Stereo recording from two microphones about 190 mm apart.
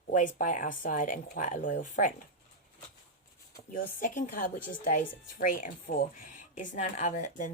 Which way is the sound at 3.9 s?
45° left (ahead or behind).